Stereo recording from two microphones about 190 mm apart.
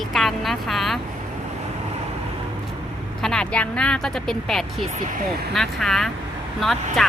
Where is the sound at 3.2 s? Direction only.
5° left (ahead or behind).